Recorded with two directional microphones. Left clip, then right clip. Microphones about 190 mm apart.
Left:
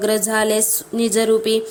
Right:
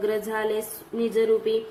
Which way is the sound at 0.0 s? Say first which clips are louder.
Left 7 dB; 55° left (ahead or behind).